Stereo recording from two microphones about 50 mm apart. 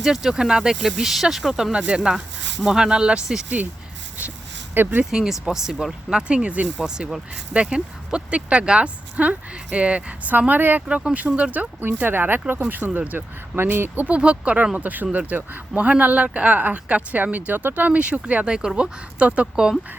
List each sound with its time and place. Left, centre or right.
0.0 s speech: centre
1.7 s speech: centre
4.7 s speech: right
5.1 s speech: centre
6.1 s speech: right
6.8 s speech: centre
10.3 s speech: right
10.8 s speech: right
13.6 s speech: right
14.0 s speech: right
18.4 s speech: centre
18.8 s speech: right